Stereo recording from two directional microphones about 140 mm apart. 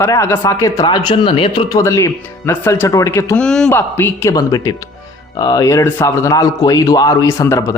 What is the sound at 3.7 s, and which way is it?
Speech, 15° left (ahead or behind).